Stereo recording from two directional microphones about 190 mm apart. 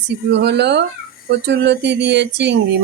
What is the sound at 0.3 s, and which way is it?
Speech, 65° right (ahead or behind).